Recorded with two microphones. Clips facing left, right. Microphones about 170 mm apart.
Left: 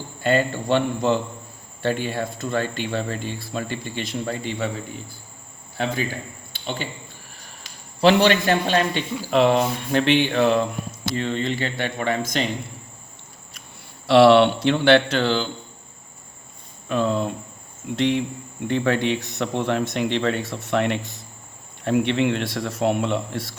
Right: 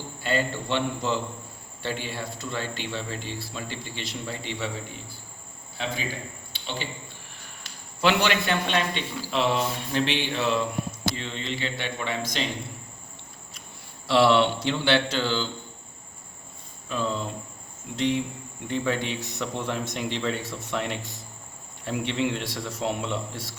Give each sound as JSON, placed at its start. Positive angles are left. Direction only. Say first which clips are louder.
{"t": 0.2, "sound": "speech", "louder": "left 6 dB", "side_deg": 50}
{"t": 5.8, "sound": "speech", "louder": "left 6 dB", "side_deg": 55}
{"t": 6.5, "sound": "cricket", "louder": "left 5 dB", "side_deg": 50}
{"t": 8.0, "sound": "a man's voice", "louder": "left 7 dB", "side_deg": 40}
{"t": 9.3, "sound": "a man's voice", "louder": "left 7 dB", "side_deg": 55}
{"t": 14.1, "sound": "a man's voice", "louder": "left 7 dB", "side_deg": 65}
{"t": 16.9, "sound": "a man's voice", "louder": "left 7 dB", "side_deg": 60}